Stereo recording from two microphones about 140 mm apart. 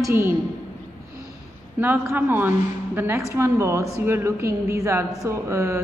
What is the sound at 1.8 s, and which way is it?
A woman's voice, 15° right (ahead or behind).